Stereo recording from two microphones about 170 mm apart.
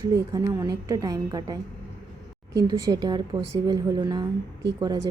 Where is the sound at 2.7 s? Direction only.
25° right (ahead or behind).